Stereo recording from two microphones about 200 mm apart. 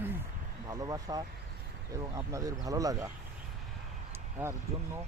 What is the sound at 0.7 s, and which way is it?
Speech, 15° right (ahead or behind).